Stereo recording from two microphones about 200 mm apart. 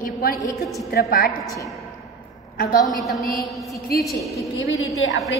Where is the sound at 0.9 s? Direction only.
50° left (ahead or behind).